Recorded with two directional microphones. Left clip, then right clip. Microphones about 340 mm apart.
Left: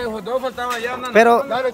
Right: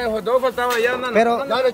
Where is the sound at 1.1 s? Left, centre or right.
Centre.